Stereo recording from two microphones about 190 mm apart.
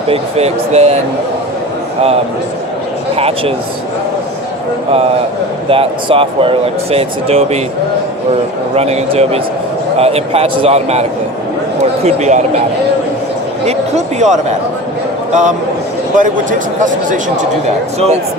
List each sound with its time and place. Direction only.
0.1 s a man's voice: 35° right (ahead or behind)
3.2 s a man's voice: 30° right (ahead or behind)
5.6 s speech: 30° right (ahead or behind)
8.7 s a man's voice: 35° right (ahead or behind)
13.7 s a man's voice: 35° right (ahead or behind)
16.1 s speech: 45° right (ahead or behind)